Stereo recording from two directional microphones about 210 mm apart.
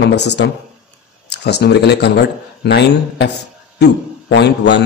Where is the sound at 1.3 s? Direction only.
50° left (ahead or behind).